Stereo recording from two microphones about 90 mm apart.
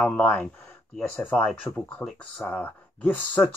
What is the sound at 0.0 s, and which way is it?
Speech, 15° left (ahead or behind).